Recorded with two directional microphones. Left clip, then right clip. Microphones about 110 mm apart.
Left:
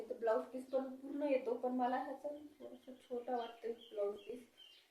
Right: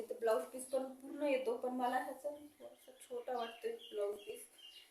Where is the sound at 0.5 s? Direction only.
15° right (ahead or behind).